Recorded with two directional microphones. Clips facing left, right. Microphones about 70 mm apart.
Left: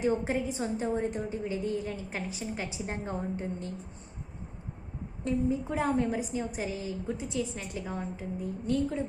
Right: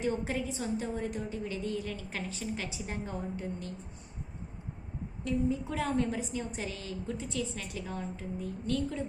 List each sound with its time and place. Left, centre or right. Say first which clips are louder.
0.0 s a woman's voice: left 4 dB; left
5.2 s a woman's voice: left 2 dB; left